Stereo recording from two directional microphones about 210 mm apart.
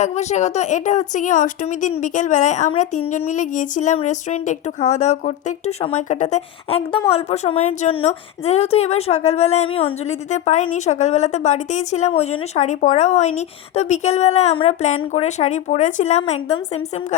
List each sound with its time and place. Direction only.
0.0 s speech: 35° left (ahead or behind)